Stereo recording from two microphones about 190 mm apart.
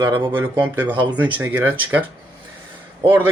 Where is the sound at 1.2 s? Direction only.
10° right (ahead or behind).